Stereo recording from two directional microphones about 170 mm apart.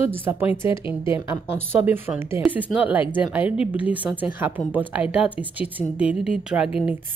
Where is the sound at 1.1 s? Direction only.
15° right (ahead or behind).